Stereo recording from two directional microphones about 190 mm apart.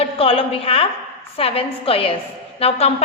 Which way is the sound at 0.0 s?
30° left (ahead or behind).